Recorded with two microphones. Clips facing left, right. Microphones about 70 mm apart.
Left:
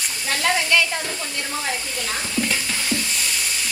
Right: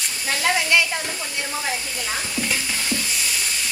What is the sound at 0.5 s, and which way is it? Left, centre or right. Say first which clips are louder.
Speech: even; centre.